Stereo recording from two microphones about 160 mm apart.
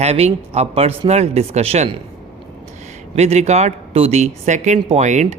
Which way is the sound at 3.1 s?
40° right (ahead or behind).